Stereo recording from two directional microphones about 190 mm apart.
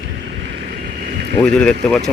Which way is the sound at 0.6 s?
55° right (ahead or behind).